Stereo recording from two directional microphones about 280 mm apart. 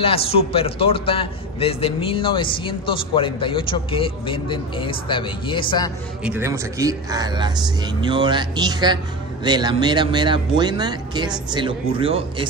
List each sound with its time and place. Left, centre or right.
0.0 s a man's voice: centre
6.2 s speech: centre